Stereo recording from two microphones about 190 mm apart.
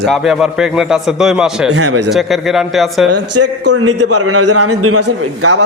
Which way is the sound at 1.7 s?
75° right (ahead or behind).